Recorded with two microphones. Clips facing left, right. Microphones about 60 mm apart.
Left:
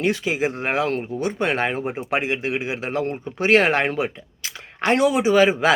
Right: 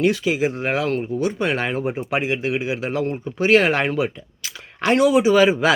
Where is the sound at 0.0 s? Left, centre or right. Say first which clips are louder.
Right 3 dB; left.